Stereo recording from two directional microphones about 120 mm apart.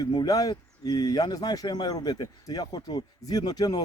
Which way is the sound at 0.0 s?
35° left (ahead or behind).